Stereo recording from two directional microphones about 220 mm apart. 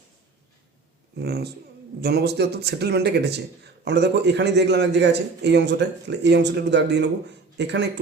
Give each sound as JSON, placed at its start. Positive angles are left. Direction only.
{"t": 1.1, "sound": "speech", "side_deg": -50}